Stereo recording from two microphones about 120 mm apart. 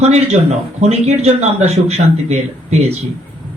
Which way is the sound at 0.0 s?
65° right (ahead or behind).